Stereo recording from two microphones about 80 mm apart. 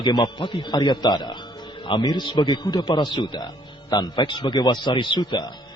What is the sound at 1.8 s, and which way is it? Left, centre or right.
A man's voice, left.